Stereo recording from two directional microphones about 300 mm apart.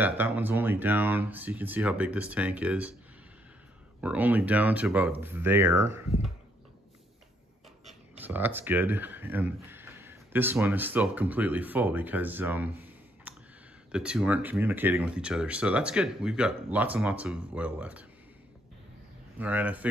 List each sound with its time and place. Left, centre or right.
0.0 s speech: centre
4.0 s speech: centre
7.8 s speech: centre
19.3 s speech: centre